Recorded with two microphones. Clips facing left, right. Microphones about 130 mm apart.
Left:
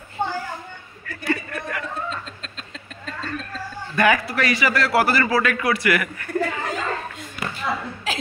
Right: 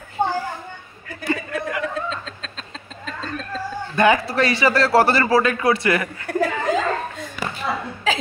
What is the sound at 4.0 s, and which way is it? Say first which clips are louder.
Speech: right 3 dB; 25° right (ahead or behind).